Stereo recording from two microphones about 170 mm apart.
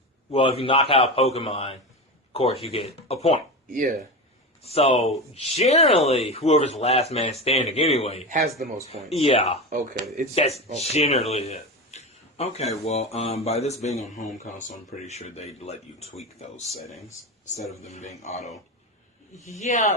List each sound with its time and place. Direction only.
0.3 s speech: 35° left (ahead or behind)
3.7 s speech: 50° right (ahead or behind)
4.6 s speech: 35° left (ahead or behind)
8.6 s speech: 50° right (ahead or behind)
9.0 s speech: 35° left (ahead or behind)